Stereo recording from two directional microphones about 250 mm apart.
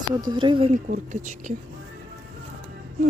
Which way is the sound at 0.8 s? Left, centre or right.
Right.